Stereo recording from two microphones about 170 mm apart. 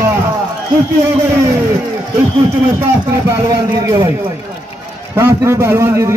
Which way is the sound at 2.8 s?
15° right (ahead or behind).